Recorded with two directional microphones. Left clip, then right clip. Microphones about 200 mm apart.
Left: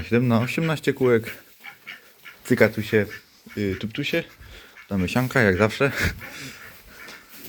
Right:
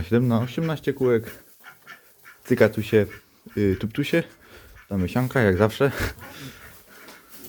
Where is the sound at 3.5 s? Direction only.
50° right (ahead or behind).